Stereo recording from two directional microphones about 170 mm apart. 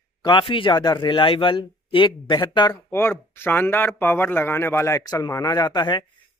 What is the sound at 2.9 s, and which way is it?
Speech, 15° left (ahead or behind).